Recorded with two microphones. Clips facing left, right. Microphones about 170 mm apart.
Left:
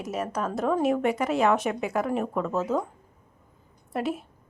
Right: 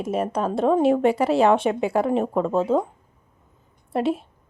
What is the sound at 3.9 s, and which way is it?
Speech, 25° right (ahead or behind).